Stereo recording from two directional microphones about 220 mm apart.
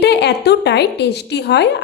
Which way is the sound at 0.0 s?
50° left (ahead or behind).